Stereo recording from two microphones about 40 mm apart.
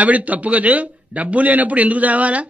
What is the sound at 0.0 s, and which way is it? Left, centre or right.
Speech, right.